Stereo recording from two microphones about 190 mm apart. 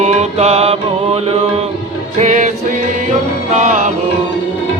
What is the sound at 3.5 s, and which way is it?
Music, 40° right (ahead or behind).